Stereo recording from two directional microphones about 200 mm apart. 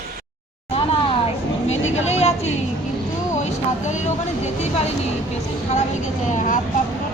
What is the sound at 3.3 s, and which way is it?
Vehicle, 35° left (ahead or behind).